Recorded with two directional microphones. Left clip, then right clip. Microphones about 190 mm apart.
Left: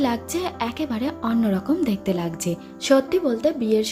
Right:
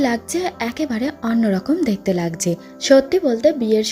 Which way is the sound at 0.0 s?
20° right (ahead or behind).